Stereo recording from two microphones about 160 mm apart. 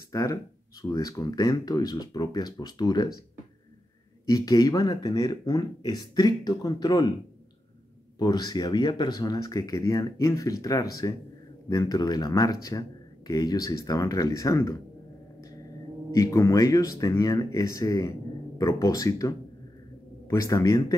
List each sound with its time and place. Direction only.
0.1 s speech: 20° left (ahead or behind)
4.3 s speech: 25° left (ahead or behind)
8.2 s speech: 25° left (ahead or behind)
16.1 s speech: 20° left (ahead or behind)